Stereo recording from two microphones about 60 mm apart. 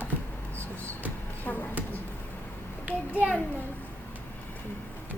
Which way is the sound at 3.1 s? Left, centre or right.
Left.